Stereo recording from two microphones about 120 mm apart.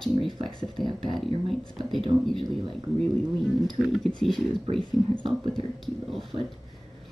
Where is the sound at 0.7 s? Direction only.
40° right (ahead or behind).